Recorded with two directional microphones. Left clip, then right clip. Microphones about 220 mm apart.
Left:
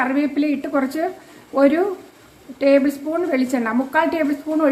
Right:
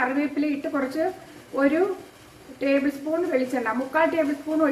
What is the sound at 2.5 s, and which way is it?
A woman's voice, 40° left (ahead or behind).